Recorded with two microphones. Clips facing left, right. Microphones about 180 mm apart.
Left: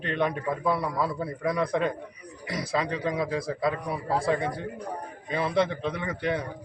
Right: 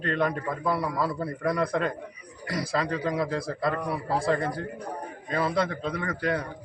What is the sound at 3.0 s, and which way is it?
A man's voice, centre (ahead or behind).